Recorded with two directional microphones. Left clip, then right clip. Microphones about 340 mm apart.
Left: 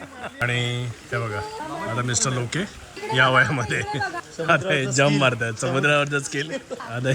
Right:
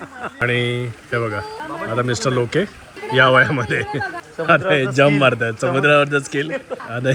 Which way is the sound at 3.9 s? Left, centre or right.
Right.